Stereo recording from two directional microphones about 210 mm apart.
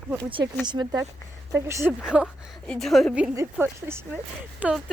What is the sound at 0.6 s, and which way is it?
A woman's voice, 20° right (ahead or behind).